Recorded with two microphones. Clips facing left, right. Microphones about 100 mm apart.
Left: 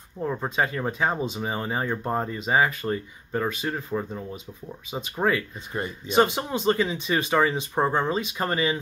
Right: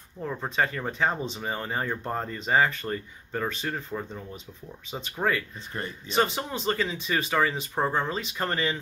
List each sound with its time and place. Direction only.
0.2 s speech: 15° left (ahead or behind)